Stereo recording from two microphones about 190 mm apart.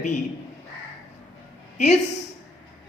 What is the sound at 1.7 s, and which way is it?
Speech, 35° left (ahead or behind).